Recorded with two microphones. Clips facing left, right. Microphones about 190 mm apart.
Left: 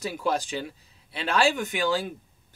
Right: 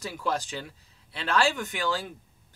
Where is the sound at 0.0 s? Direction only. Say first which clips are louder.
Left 3 dB; 15° left (ahead or behind).